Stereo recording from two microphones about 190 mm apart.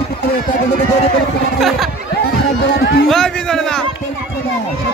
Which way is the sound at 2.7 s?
60° left (ahead or behind).